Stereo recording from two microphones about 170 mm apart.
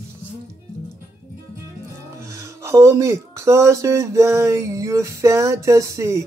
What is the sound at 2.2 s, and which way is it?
Speech, 15° right (ahead or behind).